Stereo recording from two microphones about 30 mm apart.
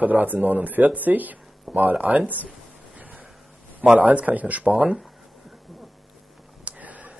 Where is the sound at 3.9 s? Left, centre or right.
Right.